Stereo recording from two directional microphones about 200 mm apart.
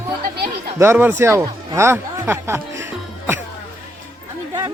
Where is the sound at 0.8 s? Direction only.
10° right (ahead or behind).